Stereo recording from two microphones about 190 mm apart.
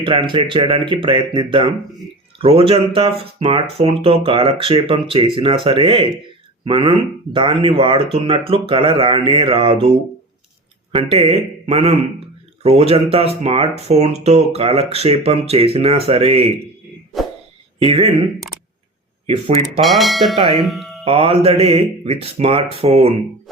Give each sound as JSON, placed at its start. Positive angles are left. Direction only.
{"t": 0.0, "sound": "speech", "side_deg": -25}
{"t": 10.9, "sound": "speech", "side_deg": -30}
{"t": 17.7, "sound": "speech", "side_deg": -30}
{"t": 19.3, "sound": "speech", "side_deg": -35}
{"t": 19.8, "sound": "speech", "side_deg": 0}
{"t": 20.6, "sound": "music", "side_deg": 0}
{"t": 21.0, "sound": "speech", "side_deg": -30}